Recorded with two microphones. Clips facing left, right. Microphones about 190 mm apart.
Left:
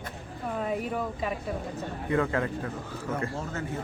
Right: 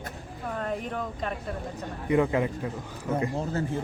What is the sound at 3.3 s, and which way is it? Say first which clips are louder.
Speech: right 5 dB; 35° right (ahead or behind).